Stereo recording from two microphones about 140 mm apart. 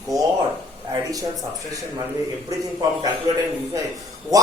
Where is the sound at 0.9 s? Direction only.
25° right (ahead or behind).